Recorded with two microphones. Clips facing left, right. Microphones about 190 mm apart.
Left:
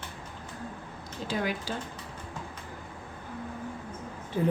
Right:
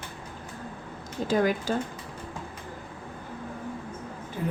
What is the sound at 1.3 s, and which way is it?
Speech, 45° right (ahead or behind).